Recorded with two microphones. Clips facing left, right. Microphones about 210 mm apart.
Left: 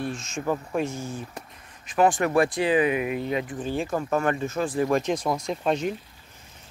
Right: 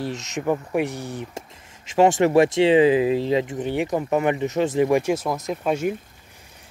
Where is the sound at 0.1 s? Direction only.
20° right (ahead or behind).